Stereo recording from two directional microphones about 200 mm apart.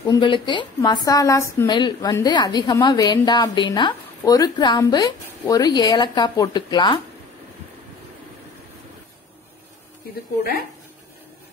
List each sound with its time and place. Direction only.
0.0 s a woman's voice: 20° left (ahead or behind)